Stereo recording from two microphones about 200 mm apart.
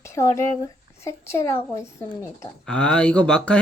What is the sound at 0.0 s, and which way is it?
Speech, 15° left (ahead or behind).